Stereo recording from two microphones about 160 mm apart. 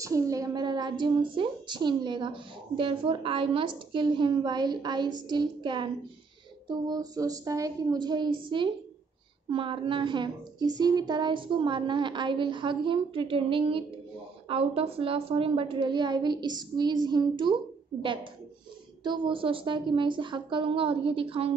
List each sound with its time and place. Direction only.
0.0 s a woman's voice: 20° right (ahead or behind); by 21.5 s 35° right (ahead or behind)